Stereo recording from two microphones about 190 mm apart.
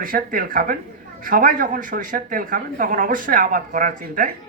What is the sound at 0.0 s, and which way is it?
Speech, 50° right (ahead or behind).